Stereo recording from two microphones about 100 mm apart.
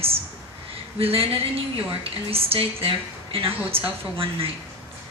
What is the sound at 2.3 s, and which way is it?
A woman's voice, 75° right (ahead or behind).